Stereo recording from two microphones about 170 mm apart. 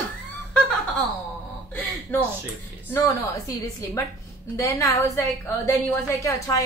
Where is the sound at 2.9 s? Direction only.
15° left (ahead or behind).